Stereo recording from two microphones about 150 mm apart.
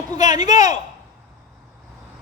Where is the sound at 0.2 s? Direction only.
25° right (ahead or behind).